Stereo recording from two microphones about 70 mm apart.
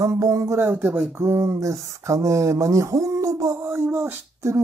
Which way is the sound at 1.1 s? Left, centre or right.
Right.